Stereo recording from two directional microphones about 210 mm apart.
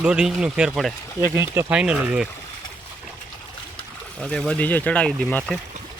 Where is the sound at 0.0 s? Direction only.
5° right (ahead or behind).